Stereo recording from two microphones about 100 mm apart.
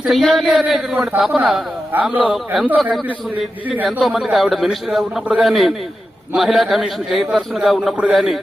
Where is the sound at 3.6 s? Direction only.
15° right (ahead or behind).